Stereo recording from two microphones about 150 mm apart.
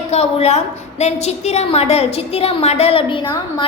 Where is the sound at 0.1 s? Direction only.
45° left (ahead or behind).